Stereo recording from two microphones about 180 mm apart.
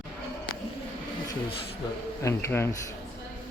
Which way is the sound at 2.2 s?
15° left (ahead or behind).